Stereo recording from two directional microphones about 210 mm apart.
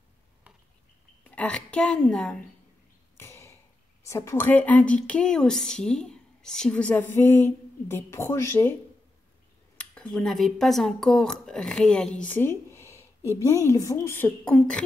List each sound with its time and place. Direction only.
1.2 s a woman's voice: 5° left (ahead or behind)
3.2 s a sound: 10° left (ahead or behind)
4.1 s a woman's voice: 15° left (ahead or behind)
9.8 s speech: 5° left (ahead or behind)